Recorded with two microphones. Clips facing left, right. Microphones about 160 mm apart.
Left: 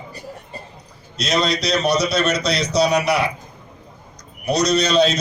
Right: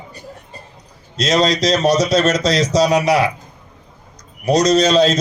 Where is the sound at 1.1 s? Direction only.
90° right.